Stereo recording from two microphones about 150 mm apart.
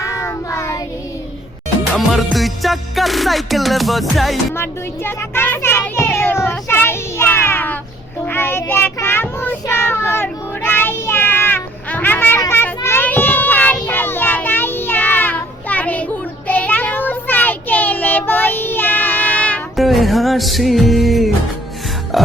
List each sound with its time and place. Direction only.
0.0 s child singing: 20° left (ahead or behind)
2.0 s music: centre (ahead or behind)
4.5 s a sound: 15° left (ahead or behind)
8.2 s child singing: 15° left (ahead or behind)
19.7 s music: centre (ahead or behind)
22.1 s burping: centre (ahead or behind)